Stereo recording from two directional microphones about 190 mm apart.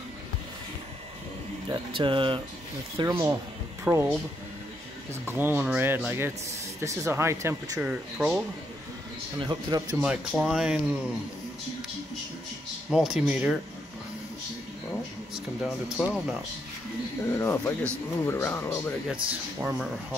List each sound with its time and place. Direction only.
1.7 s speech: 25° right (ahead or behind); by 4.1 s 10° right (ahead or behind)
5.2 s speech: 10° right (ahead or behind)
9.4 s speech: 20° right (ahead or behind)
10.0 s speech: 5° right (ahead or behind)
12.9 s speech: 5° right (ahead or behind)
15.3 s speech: 5° right (ahead or behind)
17.4 s speech: 15° left (ahead or behind)
19.6 s speech: 5° right (ahead or behind)